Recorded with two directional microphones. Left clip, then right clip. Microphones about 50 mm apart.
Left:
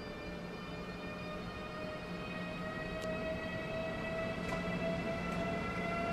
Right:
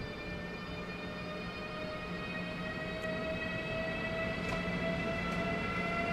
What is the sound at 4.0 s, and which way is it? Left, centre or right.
Train, right.